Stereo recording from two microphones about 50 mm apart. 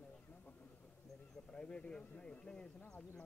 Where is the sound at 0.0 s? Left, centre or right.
Left.